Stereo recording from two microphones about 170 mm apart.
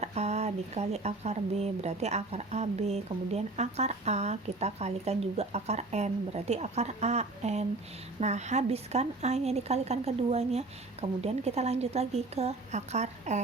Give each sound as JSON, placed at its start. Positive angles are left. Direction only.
{"t": 0.0, "sound": "speech", "side_deg": -40}